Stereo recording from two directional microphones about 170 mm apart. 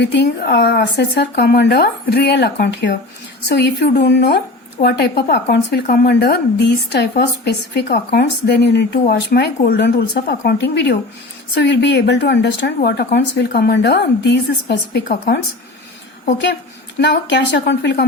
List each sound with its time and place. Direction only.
0.0 s speech: 75° left (ahead or behind)
5.8 s a woman's voice: 55° left (ahead or behind)
17.0 s a woman's voice: 90° left